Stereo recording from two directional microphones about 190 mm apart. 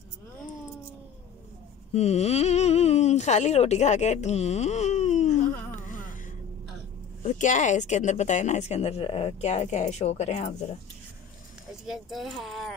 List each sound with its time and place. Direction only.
2.0 s a sound: 35° left (ahead or behind)
7.2 s speech: 40° left (ahead or behind)
11.8 s speech: centre (ahead or behind)